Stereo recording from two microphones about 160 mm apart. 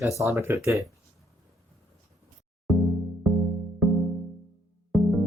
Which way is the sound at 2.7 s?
Centre (ahead or behind).